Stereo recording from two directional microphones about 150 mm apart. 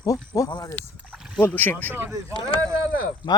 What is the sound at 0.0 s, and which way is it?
Speech, 20° left (ahead or behind).